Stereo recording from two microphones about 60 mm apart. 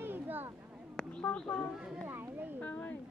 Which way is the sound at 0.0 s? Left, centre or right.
Right.